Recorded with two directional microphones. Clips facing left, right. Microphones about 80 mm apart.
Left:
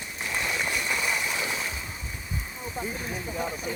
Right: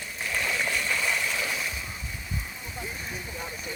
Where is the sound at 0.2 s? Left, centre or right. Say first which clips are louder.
Even; left.